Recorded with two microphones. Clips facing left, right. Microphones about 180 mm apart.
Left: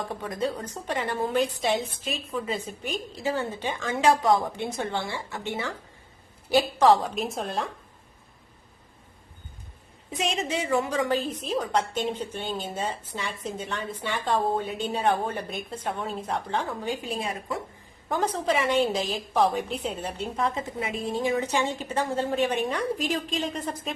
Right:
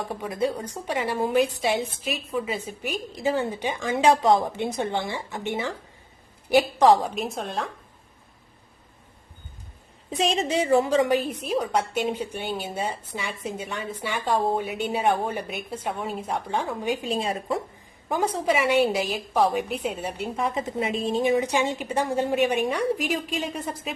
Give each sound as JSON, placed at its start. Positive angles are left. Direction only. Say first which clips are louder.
{"t": 0.1, "sound": "a woman's voice", "louder": "right 3 dB", "side_deg": -10}
{"t": 7.2, "sound": "a woman's voice", "louder": "even", "side_deg": 0}
{"t": 10.2, "sound": "a woman's voice", "louder": "right 5 dB", "side_deg": -35}
{"t": 11.1, "sound": "a woman's voice", "louder": "right 3 dB", "side_deg": -15}
{"t": 17.0, "sound": "a woman's voice", "louder": "right 4 dB", "side_deg": -25}
{"t": 18.1, "sound": "a woman's voice", "louder": "right 2 dB", "side_deg": -10}
{"t": 20.6, "sound": "a woman's voice", "louder": "right 4 dB", "side_deg": -25}